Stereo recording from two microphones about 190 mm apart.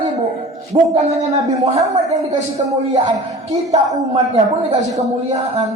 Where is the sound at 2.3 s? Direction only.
35° right (ahead or behind).